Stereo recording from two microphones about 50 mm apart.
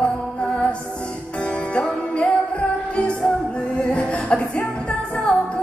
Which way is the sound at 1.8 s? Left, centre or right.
Left.